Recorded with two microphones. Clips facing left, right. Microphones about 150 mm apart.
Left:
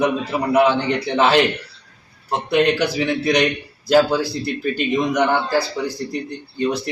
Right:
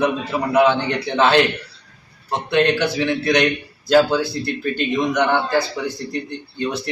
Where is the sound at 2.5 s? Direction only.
10° left (ahead or behind).